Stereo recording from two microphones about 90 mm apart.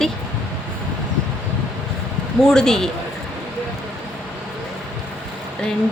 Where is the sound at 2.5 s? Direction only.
5° left (ahead or behind).